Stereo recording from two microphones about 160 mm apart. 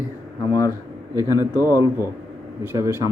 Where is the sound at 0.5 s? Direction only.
20° left (ahead or behind).